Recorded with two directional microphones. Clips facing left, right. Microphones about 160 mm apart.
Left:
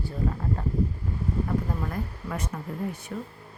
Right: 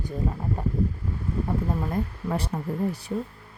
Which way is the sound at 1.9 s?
30° right (ahead or behind).